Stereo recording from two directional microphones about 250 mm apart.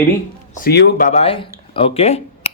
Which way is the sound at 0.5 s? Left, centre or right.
Left.